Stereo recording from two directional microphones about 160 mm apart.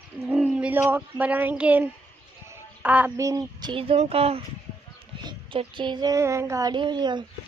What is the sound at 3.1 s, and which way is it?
Speech, 20° right (ahead or behind).